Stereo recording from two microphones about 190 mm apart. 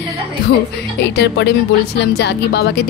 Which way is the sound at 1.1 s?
60° left (ahead or behind).